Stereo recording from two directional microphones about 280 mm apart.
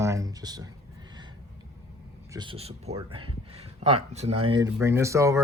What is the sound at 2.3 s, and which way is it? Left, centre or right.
Speech, centre.